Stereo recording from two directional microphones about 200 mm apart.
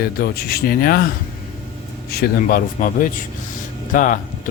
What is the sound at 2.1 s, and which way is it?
Speech, 50° left (ahead or behind).